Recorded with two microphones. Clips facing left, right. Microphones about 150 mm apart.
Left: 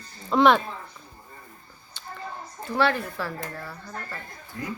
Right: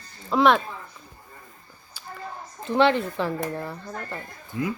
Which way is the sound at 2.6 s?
20° right (ahead or behind).